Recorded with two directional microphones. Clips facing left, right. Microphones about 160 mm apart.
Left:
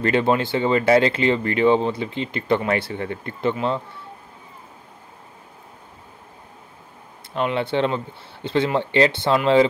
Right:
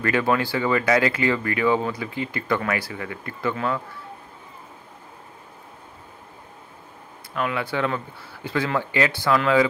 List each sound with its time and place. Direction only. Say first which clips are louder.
0.0 s speech: left 3 dB; 25° left (ahead or behind)
7.3 s speech: left 4 dB; 25° left (ahead or behind)